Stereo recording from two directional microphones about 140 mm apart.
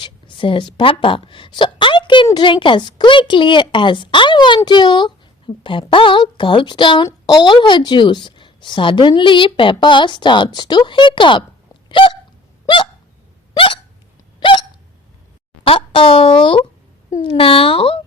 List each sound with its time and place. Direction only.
0.0 s a woman's voice: 35° left (ahead or behind)
11.9 s hiccup: 35° left (ahead or behind)
14.3 s hiccup: 35° left (ahead or behind)
15.6 s speech: 40° left (ahead or behind)